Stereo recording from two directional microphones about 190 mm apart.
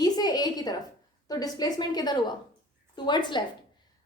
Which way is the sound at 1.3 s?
20° left (ahead or behind).